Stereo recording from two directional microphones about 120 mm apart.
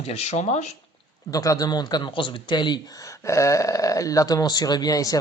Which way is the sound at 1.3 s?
30° left (ahead or behind).